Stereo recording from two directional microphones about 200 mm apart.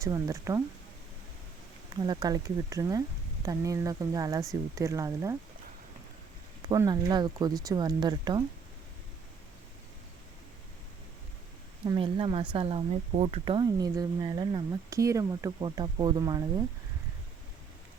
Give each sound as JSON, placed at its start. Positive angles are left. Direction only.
{"t": 0.0, "sound": "speech", "side_deg": -15}
{"t": 2.0, "sound": "speech", "side_deg": -20}
{"t": 6.6, "sound": "speech", "side_deg": -20}
{"t": 11.9, "sound": "speech", "side_deg": -25}